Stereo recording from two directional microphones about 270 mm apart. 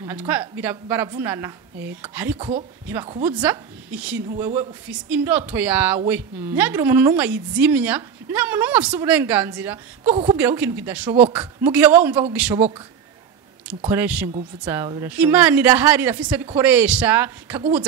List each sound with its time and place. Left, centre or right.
0.0 s a woman's voice: centre
2.3 s a woman's voice: right
13.8 s a woman's voice: centre